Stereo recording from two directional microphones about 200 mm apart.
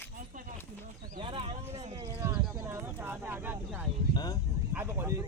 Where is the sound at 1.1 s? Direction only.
25° right (ahead or behind).